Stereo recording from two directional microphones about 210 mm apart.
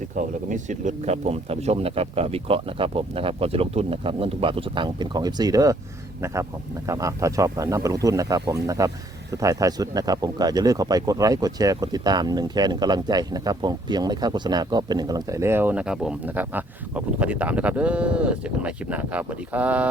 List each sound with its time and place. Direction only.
0.2 s speech: 35° right (ahead or behind); by 5.7 s 15° right (ahead or behind)
6.8 s speech: 15° right (ahead or behind)